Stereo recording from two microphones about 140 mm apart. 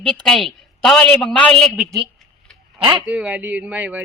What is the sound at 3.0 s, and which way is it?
Speech, 10° right (ahead or behind).